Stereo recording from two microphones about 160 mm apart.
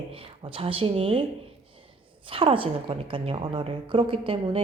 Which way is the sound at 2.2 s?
35° right (ahead or behind).